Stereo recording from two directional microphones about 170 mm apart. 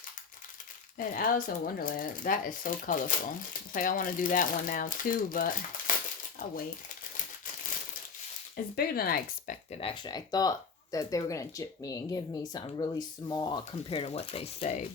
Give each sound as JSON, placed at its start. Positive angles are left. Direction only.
{"t": 0.9, "sound": "speech", "side_deg": 55}
{"t": 5.9, "sound": "crumpling", "side_deg": 50}
{"t": 8.7, "sound": "speech", "side_deg": 60}
{"t": 9.8, "sound": "speech", "side_deg": 30}